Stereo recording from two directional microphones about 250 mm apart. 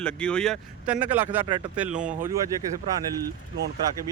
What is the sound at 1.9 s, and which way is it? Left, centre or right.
Speech, right.